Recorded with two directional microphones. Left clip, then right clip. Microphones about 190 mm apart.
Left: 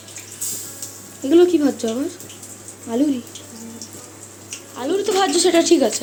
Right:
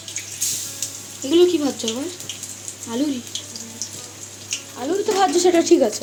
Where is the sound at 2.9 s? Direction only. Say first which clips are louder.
Left 4 dB; centre (ahead or behind).